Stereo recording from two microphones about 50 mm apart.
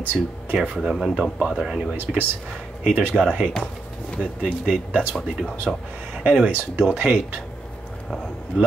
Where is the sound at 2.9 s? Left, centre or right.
Right.